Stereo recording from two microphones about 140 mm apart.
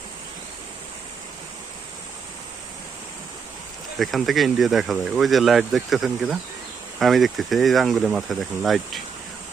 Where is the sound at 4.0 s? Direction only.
Centre (ahead or behind).